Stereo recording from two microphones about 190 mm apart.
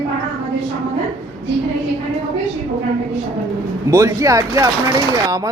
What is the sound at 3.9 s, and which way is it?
Speech, 15° right (ahead or behind).